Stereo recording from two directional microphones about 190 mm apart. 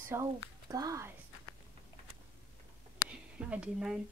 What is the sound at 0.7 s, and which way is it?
Speech, 20° right (ahead or behind).